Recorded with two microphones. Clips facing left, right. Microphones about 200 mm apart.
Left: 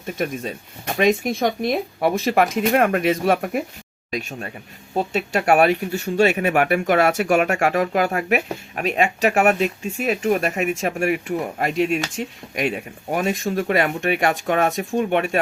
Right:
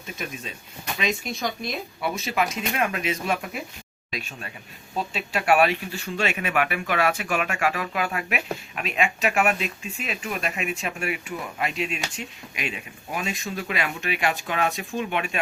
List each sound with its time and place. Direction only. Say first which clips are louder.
0.0 s speech: left 9 dB; 50° left (ahead or behind)